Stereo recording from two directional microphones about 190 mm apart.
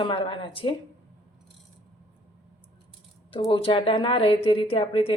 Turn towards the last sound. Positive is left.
turn(degrees=30)  # may be behind; listen again after turning